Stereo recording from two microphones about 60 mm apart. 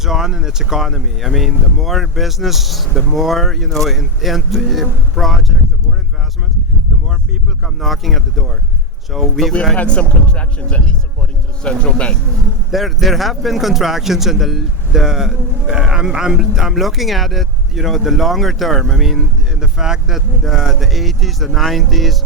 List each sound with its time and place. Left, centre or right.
0.0 s speech: centre
7.6 s speech: centre
9.7 s speech: centre
12.7 s speech: centre